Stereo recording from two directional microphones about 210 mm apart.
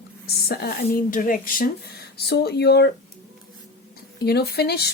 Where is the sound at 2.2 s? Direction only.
50° left (ahead or behind).